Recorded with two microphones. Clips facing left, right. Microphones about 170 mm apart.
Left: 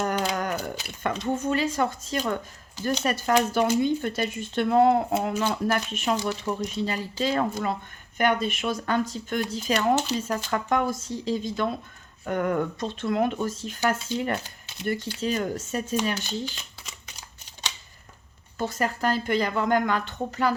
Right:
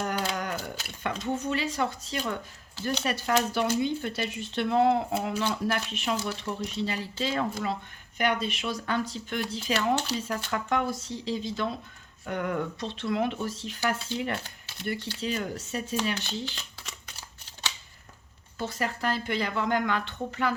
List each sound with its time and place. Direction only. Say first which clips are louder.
0.0 s a sound: left 4 dB; 45° left (ahead or behind)
1.0 s speech: left 4 dB; 45° left (ahead or behind)
18.5 s speech: left 4 dB; 45° left (ahead or behind)